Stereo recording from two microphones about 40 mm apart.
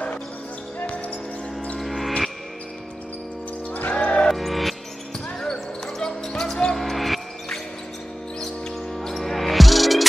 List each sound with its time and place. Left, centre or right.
1.8 s music: centre
3.7 s music: left
4.0 s music: left
4.3 s music: centre
5.4 s basketball bounce: centre
8.9 s music: centre